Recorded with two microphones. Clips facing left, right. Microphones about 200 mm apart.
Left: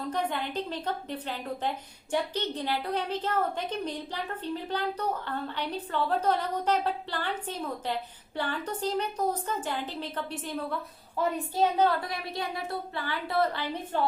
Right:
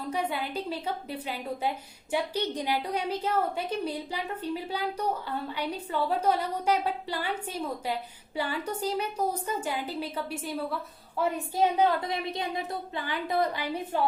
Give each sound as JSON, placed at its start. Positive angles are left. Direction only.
{"t": 0.1, "sound": "a woman's voice", "side_deg": -10}